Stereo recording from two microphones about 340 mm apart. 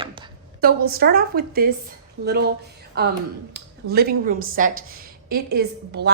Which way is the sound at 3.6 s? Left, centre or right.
Right.